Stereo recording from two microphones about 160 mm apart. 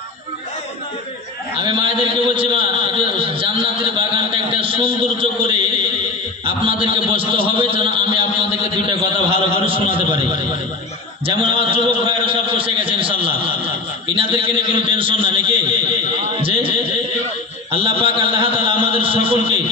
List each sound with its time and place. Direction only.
1.6 s a man's voice: 30° right (ahead or behind)
11.2 s a man's voice: 35° right (ahead or behind)
17.6 s a sound: 35° right (ahead or behind)